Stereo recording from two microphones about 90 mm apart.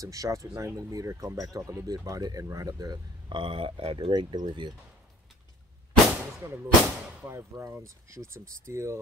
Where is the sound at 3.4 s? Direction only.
75° right (ahead or behind); by 4.7 s 55° right (ahead or behind).